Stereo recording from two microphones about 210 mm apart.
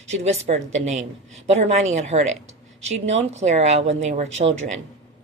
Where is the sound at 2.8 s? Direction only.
65° right (ahead or behind).